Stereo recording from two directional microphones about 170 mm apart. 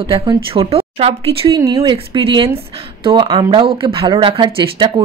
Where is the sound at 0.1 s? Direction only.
30° right (ahead or behind).